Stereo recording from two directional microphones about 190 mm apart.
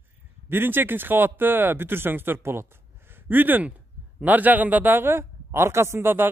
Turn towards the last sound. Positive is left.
turn(degrees=-10)  # may be behind; listen again after turning